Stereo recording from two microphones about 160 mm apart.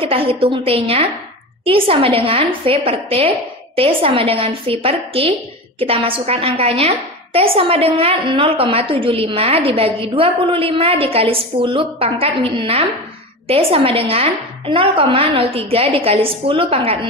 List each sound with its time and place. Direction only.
0.0 s a woman's voice: 35° right (ahead or behind)